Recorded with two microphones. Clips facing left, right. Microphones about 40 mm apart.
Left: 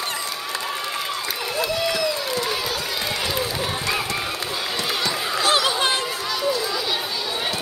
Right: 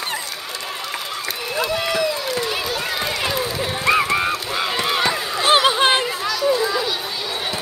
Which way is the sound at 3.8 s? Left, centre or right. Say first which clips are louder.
Right 7 dB; right.